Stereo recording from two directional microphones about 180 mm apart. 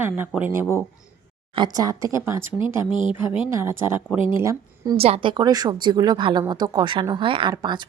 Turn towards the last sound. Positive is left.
turn(degrees=-25)  # may be behind; listen again after turning